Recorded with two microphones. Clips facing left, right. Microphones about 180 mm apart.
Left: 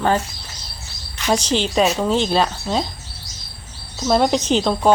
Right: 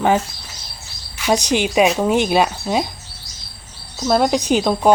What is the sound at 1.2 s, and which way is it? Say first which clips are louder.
Speech: right 2 dB; 10° right (ahead or behind).